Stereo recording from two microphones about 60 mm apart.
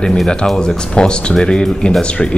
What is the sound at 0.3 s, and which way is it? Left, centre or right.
Speech, centre.